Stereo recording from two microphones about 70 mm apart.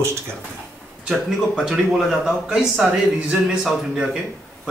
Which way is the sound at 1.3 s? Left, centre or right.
Centre.